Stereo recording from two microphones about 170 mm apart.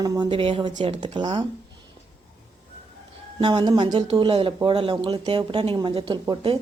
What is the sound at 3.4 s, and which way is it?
A woman's voice, 25° right (ahead or behind).